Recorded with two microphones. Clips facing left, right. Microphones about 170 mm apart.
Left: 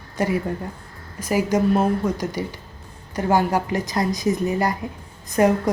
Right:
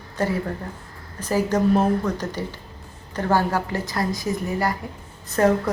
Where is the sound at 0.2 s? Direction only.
15° left (ahead or behind).